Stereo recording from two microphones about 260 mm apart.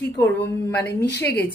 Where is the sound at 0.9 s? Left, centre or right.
Left.